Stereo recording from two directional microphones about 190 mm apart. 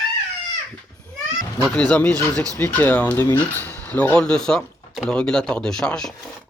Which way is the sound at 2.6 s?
10° left (ahead or behind).